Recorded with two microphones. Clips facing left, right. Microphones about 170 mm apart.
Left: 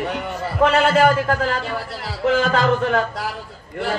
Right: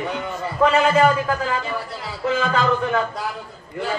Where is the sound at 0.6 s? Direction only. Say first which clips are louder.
Left 1 dB; 75° left (ahead or behind).